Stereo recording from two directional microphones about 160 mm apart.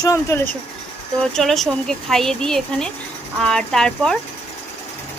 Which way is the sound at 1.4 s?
Centre (ahead or behind).